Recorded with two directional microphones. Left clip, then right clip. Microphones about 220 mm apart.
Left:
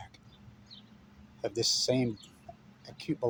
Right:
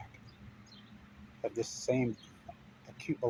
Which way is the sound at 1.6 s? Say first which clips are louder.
Left 5 dB; 25° left (ahead or behind).